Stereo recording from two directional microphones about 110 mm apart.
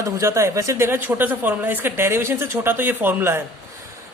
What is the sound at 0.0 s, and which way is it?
A man's voice, 25° right (ahead or behind).